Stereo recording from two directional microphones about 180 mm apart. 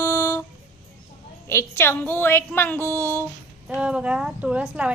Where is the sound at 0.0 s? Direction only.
15° left (ahead or behind).